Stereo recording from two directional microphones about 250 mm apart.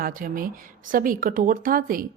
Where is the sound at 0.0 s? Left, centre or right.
Right.